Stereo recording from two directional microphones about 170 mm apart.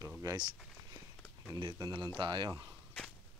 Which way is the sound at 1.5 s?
25° right (ahead or behind).